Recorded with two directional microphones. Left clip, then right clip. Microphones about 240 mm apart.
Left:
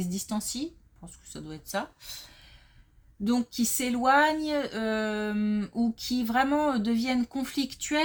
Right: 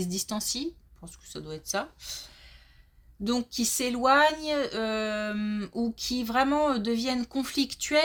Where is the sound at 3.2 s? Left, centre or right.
Right.